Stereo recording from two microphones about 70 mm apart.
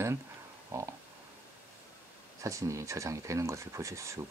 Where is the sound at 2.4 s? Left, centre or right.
Right.